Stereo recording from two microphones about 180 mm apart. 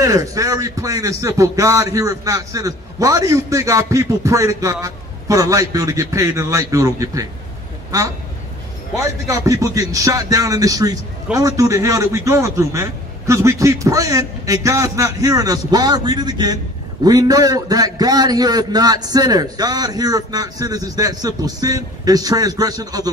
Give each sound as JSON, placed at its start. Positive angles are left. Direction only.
{"t": 0.0, "sound": "speech", "side_deg": -20}
{"t": 8.9, "sound": "a man's voice", "side_deg": -15}